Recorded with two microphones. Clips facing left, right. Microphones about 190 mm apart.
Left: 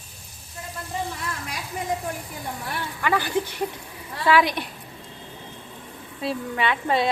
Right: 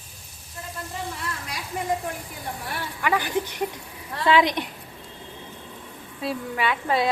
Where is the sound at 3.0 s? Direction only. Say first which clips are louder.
Left 1 dB; 15° right (ahead or behind).